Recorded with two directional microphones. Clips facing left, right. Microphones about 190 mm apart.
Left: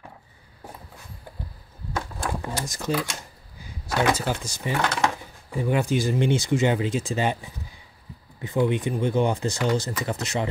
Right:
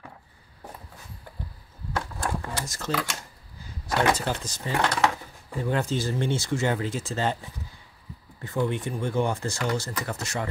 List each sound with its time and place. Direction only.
2.4 s speech: 15° left (ahead or behind)
8.4 s speech: 15° left (ahead or behind)